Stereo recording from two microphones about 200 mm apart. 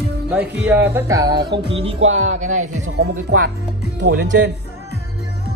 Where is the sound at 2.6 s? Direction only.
90° right; by 4.5 s 60° right (ahead or behind).